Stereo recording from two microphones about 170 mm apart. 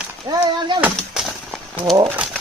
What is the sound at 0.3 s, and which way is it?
Speech, 20° right (ahead or behind).